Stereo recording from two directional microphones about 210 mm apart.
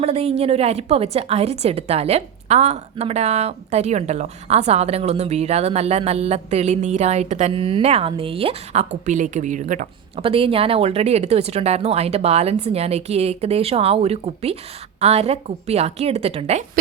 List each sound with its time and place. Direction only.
0.0 s a woman's voice: 30° right (ahead or behind)